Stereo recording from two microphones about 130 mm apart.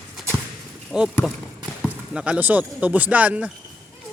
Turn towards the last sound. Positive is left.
turn(degrees=-10)  # may be behind; listen again after turning